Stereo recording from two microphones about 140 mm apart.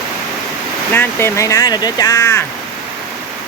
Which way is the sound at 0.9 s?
20° left (ahead or behind).